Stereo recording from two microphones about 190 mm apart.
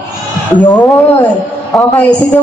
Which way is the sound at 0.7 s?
20° left (ahead or behind).